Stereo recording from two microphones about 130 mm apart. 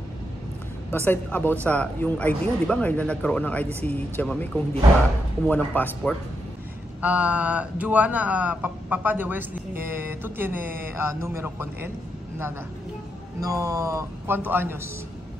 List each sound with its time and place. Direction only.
0.8 s speech: 15° left (ahead or behind)
5.5 s speech: 15° left (ahead or behind)
7.0 s speech: 10° right (ahead or behind)
13.4 s a man's voice: 25° right (ahead or behind)